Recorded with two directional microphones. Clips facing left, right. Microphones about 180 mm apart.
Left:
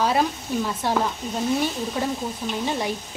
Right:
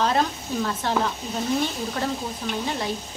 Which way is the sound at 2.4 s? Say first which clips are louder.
Even; 10° left (ahead or behind).